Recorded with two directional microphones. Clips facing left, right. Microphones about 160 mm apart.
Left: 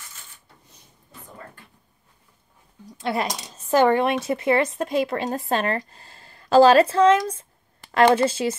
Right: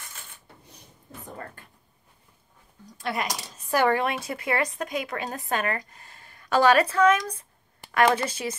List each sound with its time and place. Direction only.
3.0 s speech: 25° left (ahead or behind)